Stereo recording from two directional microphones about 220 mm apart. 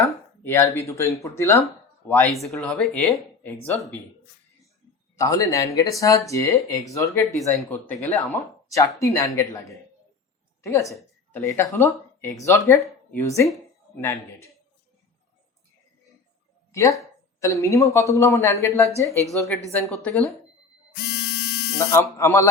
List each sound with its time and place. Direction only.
0.0 s speech: 15° left (ahead or behind)
1.6 s a sound: 10° left (ahead or behind)
2.3 s speech: centre (ahead or behind)
5.1 s a woman's voice: 15° left (ahead or behind)
16.7 s speech: 15° left (ahead or behind)
20.9 s a sound: 50° left (ahead or behind)
21.8 s speech: 15° left (ahead or behind)